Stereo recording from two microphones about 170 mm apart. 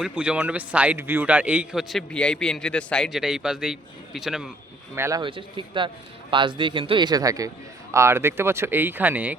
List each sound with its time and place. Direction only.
0.0 s a man's voice: 5° right (ahead or behind)
4.9 s speech: 15° right (ahead or behind)
5.2 s speech: 30° right (ahead or behind); by 9.3 s 10° right (ahead or behind)